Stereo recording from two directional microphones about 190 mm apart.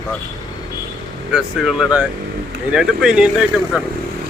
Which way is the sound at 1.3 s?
5° right (ahead or behind).